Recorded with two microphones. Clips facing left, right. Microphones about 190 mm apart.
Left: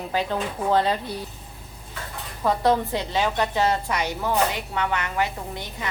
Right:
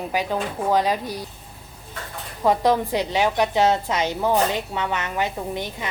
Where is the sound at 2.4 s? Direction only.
15° right (ahead or behind).